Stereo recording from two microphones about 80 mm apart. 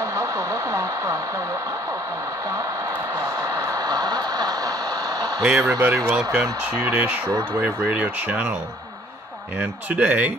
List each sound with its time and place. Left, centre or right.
0.0 s speech: right
3.2 s a sound: right
5.4 s speech: centre
5.7 s speech: right
6.0 s speech: centre
6.9 s speech: right
9.6 s speech: right